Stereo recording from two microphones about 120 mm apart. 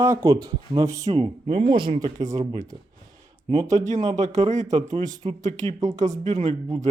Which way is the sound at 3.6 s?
75° right (ahead or behind).